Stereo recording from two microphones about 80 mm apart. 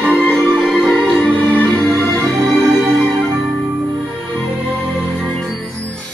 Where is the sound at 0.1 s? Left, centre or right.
Centre.